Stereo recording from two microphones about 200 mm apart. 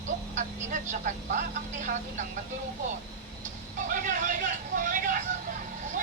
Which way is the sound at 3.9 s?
40° right (ahead or behind).